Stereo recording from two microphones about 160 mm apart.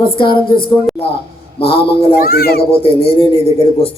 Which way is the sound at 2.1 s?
70° left (ahead or behind).